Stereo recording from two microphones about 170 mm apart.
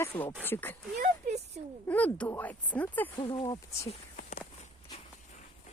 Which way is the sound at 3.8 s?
45° left (ahead or behind).